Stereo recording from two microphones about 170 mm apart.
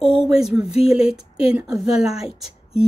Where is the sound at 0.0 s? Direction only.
35° left (ahead or behind).